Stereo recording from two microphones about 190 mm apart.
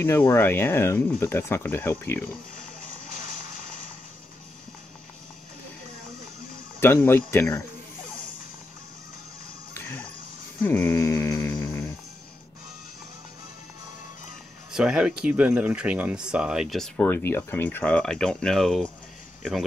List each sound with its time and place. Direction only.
0.0 s speech: 10° left (ahead or behind)
6.8 s speech: 10° left (ahead or behind)
9.8 s music: 10° left (ahead or behind)
10.6 s a sound: 15° left (ahead or behind)
14.7 s speech: 5° right (ahead or behind)